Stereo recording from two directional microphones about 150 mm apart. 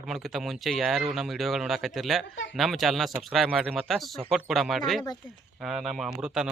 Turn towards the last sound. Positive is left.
turn(degrees=-5)  # may be behind; listen again after turning